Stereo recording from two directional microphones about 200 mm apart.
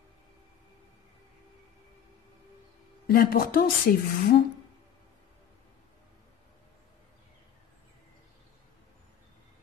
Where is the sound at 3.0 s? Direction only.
45° left (ahead or behind).